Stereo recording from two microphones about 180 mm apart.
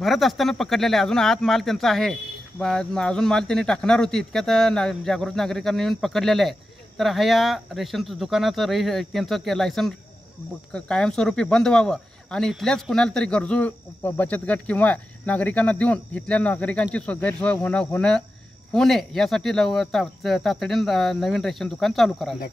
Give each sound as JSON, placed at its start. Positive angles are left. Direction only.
{"t": 0.0, "sound": "speech", "side_deg": 0}